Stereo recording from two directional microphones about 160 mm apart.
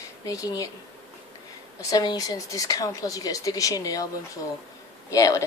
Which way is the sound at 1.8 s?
25° left (ahead or behind).